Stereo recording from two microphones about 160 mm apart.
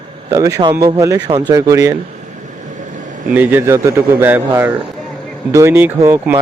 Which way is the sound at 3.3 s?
10° right (ahead or behind).